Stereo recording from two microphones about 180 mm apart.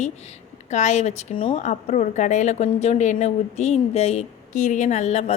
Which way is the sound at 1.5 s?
40° left (ahead or behind).